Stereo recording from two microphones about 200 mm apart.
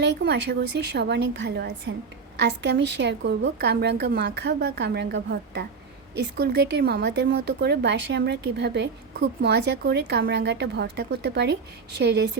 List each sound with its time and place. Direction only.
0.0 s a woman's voice: 60° right (ahead or behind)